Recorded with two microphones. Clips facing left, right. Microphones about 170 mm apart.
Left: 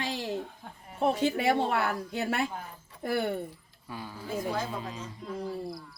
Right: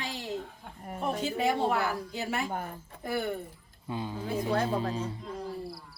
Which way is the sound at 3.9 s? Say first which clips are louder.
Right 6 dB; 20° right (ahead or behind).